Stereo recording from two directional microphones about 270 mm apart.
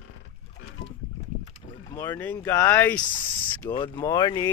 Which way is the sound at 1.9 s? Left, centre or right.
Centre.